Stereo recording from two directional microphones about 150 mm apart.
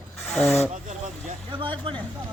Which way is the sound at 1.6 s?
35° right (ahead or behind).